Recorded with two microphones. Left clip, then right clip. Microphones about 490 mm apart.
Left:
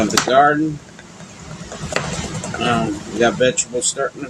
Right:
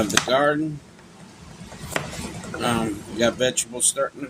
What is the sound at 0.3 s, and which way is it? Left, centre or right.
Speech, right.